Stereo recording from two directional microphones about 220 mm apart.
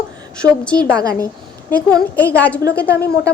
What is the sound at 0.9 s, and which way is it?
Speech, 15° right (ahead or behind).